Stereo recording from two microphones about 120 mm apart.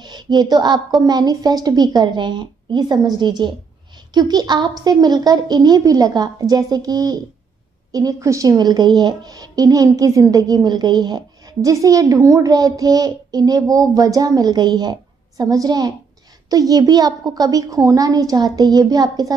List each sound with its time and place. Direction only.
0.0 s a woman's voice: 35° right (ahead or behind)